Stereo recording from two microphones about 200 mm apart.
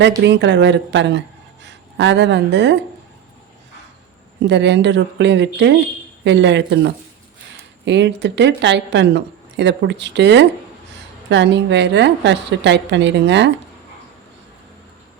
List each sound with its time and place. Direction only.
0.2 s speech: 60° right (ahead or behind)
4.4 s speech: 60° right (ahead or behind)